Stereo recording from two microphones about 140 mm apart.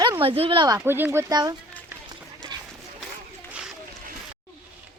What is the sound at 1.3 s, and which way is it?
Speech, 30° right (ahead or behind).